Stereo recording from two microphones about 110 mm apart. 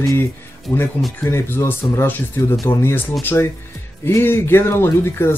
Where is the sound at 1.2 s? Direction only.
25° left (ahead or behind).